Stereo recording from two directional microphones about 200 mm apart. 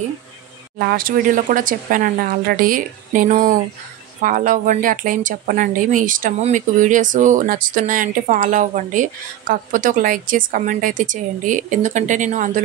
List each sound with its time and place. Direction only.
0.7 s speech: 50° right (ahead or behind)